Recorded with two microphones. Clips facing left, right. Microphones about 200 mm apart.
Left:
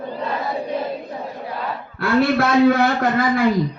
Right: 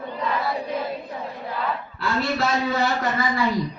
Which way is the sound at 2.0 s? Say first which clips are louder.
Left 8 dB; 60° left (ahead or behind).